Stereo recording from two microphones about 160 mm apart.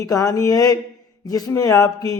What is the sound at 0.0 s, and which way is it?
Speech, 20° left (ahead or behind).